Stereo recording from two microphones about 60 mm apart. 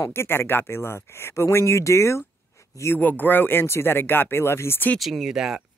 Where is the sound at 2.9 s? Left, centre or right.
Left.